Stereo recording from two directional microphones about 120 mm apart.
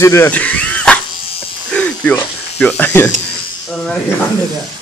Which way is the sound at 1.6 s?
10° left (ahead or behind).